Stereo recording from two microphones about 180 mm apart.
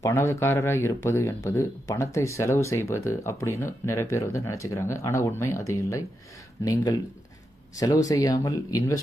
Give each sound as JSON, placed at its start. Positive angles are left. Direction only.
{"t": 0.0, "sound": "speech", "side_deg": 15}